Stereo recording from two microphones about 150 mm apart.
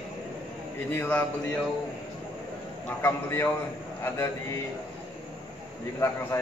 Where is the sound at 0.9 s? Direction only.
10° left (ahead or behind).